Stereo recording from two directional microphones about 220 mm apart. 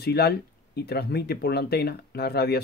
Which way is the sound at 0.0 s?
45° left (ahead or behind).